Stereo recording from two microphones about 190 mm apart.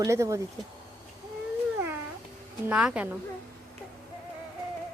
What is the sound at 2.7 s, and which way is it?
Speech, 5° right (ahead or behind).